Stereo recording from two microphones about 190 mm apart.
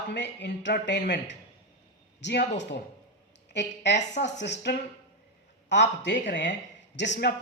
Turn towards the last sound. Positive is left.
turn(degrees=65)  # may be behind; listen again after turning